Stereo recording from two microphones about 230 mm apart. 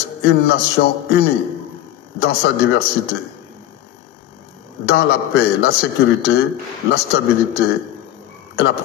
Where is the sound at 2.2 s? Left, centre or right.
Left.